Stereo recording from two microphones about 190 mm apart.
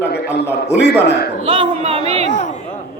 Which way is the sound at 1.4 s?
30° right (ahead or behind).